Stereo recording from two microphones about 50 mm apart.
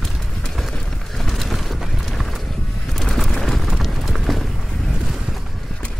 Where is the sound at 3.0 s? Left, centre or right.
Centre.